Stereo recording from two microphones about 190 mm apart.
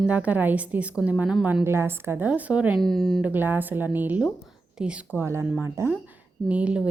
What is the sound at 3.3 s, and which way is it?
A woman's voice, 10° right (ahead or behind).